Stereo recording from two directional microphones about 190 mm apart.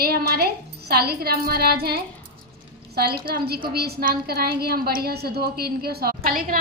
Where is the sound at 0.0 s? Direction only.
55° right (ahead or behind).